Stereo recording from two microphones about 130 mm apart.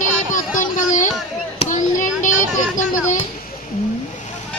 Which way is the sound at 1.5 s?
60° left (ahead or behind).